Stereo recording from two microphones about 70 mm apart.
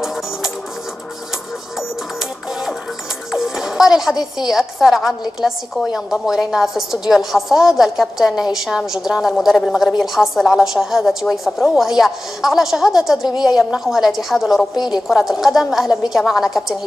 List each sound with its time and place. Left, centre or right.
3.3 s music: centre
4.5 s a woman's voice: centre
13.3 s a woman's voice: left
13.6 s a woman's voice: centre
14.8 s a woman's voice: left
15.0 s a woman's voice: centre